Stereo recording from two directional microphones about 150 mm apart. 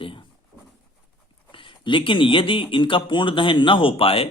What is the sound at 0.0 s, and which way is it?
Writing, 35° left (ahead or behind).